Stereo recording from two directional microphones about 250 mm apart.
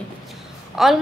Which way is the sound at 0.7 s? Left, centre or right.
Centre.